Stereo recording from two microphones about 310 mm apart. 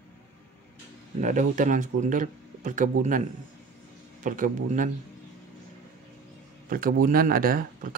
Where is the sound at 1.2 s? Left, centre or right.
Right.